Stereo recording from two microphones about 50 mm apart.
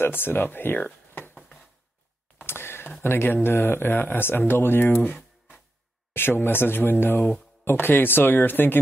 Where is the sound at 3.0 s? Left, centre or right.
Left.